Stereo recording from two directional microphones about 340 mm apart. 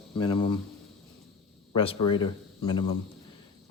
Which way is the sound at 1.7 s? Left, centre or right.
Centre.